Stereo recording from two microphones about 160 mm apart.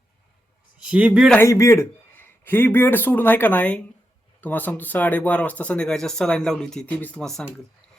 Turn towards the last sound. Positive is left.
turn(degrees=5)  # may be behind; listen again after turning